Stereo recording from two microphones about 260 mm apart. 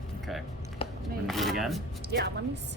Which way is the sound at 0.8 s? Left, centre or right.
Left.